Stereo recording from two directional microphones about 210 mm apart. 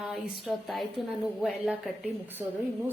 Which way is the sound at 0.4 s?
Centre (ahead or behind).